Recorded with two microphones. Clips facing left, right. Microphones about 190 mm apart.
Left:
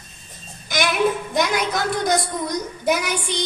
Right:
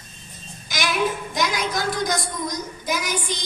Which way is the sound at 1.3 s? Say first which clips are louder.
Left 3 dB; 55° left (ahead or behind).